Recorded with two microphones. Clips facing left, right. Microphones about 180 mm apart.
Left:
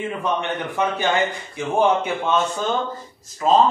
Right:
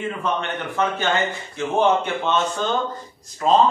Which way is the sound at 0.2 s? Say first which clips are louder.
Left 1 dB; 15° left (ahead or behind).